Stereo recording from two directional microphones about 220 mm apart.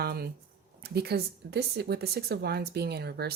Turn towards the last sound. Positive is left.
turn(degrees=-45)  # may be behind; listen again after turning